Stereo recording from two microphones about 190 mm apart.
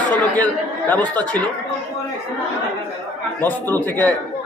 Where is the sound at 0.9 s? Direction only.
5° left (ahead or behind).